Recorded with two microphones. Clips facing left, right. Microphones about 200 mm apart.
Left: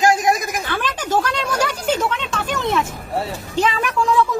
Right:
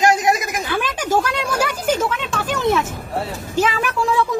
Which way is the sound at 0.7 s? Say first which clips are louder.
Right 2 dB; 10° right (ahead or behind).